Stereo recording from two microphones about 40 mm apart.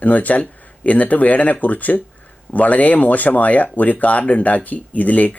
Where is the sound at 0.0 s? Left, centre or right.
Left.